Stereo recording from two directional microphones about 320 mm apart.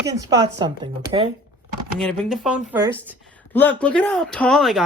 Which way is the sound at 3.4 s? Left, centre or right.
Centre.